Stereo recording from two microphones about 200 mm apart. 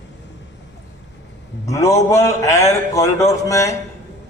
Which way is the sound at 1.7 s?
15° left (ahead or behind).